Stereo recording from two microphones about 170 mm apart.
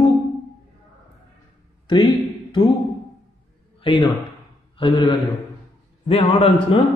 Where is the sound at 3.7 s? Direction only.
25° left (ahead or behind).